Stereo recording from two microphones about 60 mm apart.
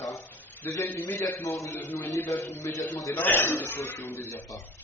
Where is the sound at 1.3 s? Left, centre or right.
Left.